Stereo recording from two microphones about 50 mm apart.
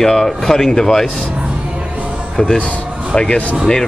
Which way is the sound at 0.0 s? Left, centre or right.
Centre.